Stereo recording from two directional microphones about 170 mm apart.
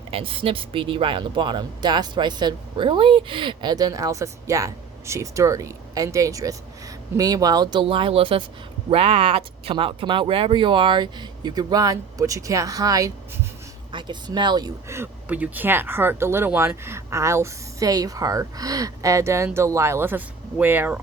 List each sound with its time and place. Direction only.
0.1 s speech: 30° right (ahead or behind); by 21.0 s 10° right (ahead or behind)